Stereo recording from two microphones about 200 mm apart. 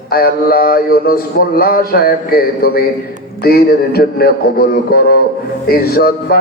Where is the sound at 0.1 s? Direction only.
50° left (ahead or behind).